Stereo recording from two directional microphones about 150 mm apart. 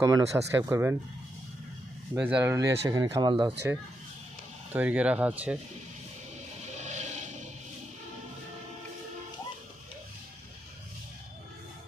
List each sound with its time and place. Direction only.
0.0 s speech: 25° right (ahead or behind)
2.1 s speech: 10° right (ahead or behind); by 3.5 s 30° right (ahead or behind)
4.7 s speech: 10° right (ahead or behind)
6.7 s music: 50° right (ahead or behind)